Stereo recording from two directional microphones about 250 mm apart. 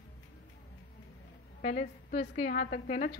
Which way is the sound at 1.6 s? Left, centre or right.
Left.